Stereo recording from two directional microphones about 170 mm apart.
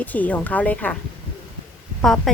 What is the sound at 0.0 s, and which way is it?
Speech, 10° left (ahead or behind).